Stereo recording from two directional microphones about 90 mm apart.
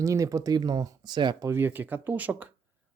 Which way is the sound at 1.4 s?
25° right (ahead or behind).